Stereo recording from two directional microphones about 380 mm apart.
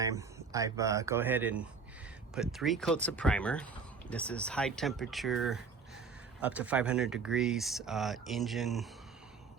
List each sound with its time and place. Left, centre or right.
0.0 s speech: centre